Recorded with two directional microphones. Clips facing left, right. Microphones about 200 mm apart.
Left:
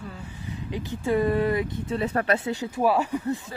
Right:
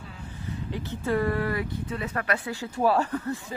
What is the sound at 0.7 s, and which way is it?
Speech, 15° left (ahead or behind).